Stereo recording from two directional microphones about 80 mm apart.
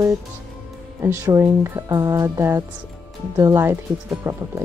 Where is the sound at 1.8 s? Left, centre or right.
Right.